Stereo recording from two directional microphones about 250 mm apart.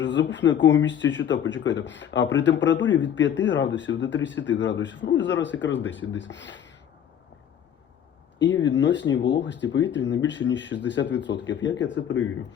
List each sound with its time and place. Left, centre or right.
0.0 s a man's voice: left
8.6 s a man's voice: left